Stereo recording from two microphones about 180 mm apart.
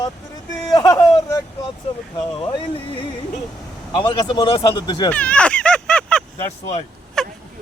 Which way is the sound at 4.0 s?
25° left (ahead or behind).